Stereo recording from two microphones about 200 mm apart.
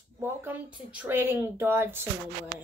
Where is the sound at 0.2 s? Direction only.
10° right (ahead or behind).